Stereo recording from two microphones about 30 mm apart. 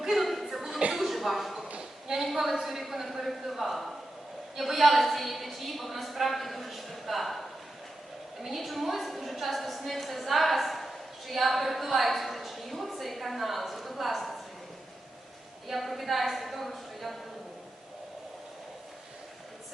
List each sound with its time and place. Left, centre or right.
0.1 s chuckle: centre
0.9 s a sound: centre
2.3 s a woman's voice: centre
15.6 s a woman's voice: centre